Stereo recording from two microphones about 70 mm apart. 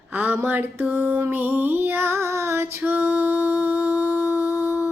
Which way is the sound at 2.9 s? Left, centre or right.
Right.